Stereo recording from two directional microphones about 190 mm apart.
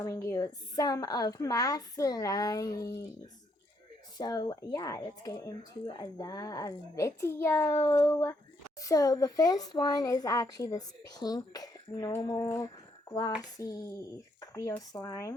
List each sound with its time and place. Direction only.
0.0 s a child's voice: 15° left (ahead or behind)
4.2 s a child's voice: 20° left (ahead or behind)